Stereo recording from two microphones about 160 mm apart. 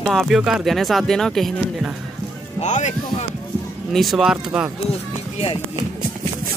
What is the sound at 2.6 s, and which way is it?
Speech, 45° left (ahead or behind).